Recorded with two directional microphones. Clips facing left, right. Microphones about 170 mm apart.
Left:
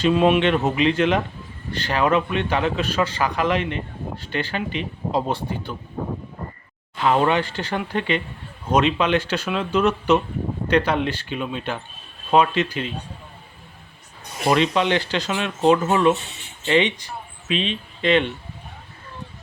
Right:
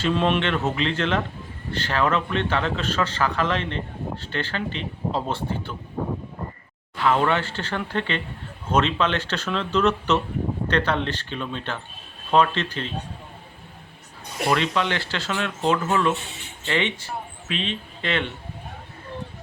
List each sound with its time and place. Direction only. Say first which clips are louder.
0.0 s a man's voice: left 5 dB; 10° left (ahead or behind)
6.9 s a man's voice: left 2 dB; 20° left (ahead or behind)
14.4 s speech: left 4 dB; 20° left (ahead or behind)